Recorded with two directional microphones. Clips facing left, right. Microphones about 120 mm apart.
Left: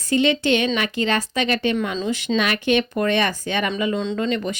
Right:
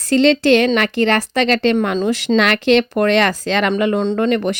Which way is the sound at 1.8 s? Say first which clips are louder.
Right 6 dB; 60° right (ahead or behind).